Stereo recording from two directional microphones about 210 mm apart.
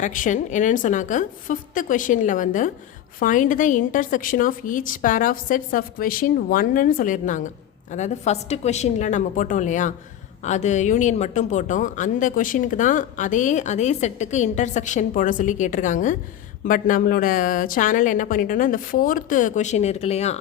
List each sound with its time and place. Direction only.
0.0 s a woman's voice: 35° left (ahead or behind)